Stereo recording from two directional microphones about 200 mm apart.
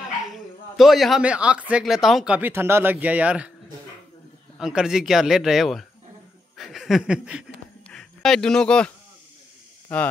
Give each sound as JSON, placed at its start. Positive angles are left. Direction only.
{"t": 0.3, "sound": "speech", "side_deg": 0}
{"t": 4.6, "sound": "speech", "side_deg": 0}
{"t": 6.6, "sound": "a sound", "side_deg": 0}
{"t": 7.9, "sound": "speech", "side_deg": 0}